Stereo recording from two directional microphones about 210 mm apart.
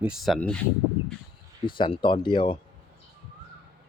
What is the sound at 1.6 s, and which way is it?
Speech, 25° left (ahead or behind).